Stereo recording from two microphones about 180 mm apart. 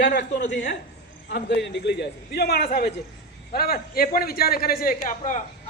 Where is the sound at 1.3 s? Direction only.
70° left (ahead or behind).